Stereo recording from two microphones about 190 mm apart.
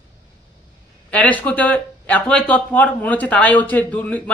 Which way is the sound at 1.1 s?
5° left (ahead or behind).